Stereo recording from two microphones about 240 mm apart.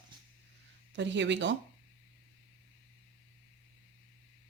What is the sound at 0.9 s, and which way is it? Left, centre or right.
Speech, right.